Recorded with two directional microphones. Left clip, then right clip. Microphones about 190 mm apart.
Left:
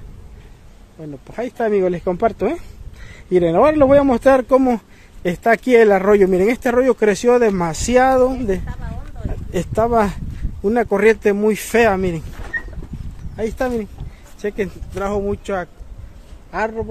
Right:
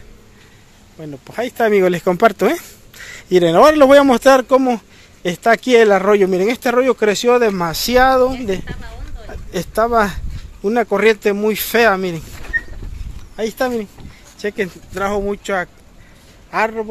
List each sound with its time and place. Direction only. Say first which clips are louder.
1.0 s speech: right 3 dB; 5° right (ahead or behind); by 12.2 s 15° left (ahead or behind)
13.4 s a man's voice: right 2 dB; 5° left (ahead or behind)